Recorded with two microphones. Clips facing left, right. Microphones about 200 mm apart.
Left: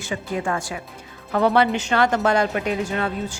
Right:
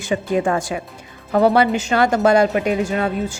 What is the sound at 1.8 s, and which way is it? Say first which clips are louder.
A woman's voice: right 4 dB; 10° right (ahead or behind).